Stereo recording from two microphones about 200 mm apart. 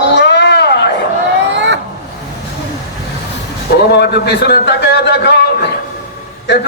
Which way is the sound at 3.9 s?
55° left (ahead or behind).